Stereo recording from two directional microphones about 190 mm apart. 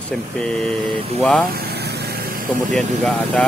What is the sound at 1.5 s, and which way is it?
Vehicle, 55° right (ahead or behind).